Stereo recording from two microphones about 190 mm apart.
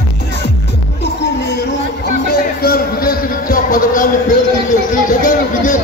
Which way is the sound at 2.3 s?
55° left (ahead or behind).